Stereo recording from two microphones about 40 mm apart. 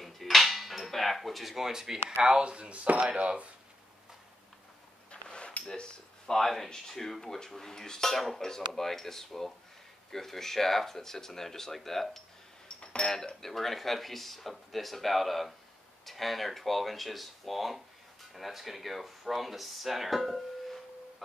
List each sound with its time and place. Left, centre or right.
0.0 s cutlery: centre
2.2 s speech: right
5.1 s a sound: left
5.7 s speech: centre
8.2 s speech: centre
12.6 s cutlery: left
13.0 s speech: centre
13.5 s speech: centre